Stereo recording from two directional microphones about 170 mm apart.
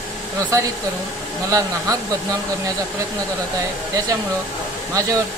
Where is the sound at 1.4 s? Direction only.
20° right (ahead or behind).